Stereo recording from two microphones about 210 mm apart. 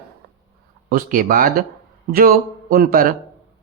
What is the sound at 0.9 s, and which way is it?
A man's voice, 40° right (ahead or behind).